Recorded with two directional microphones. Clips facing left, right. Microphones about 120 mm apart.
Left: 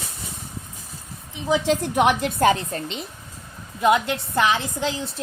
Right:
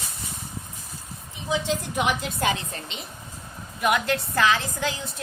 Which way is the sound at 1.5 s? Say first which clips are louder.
Left 5 dB; 65° left (ahead or behind).